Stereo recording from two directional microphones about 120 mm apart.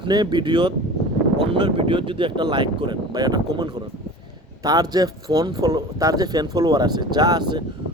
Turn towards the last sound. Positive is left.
turn(degrees=-35)  # may be behind; listen again after turning